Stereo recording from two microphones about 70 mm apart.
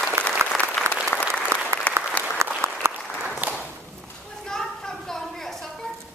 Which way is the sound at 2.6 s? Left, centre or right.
Right.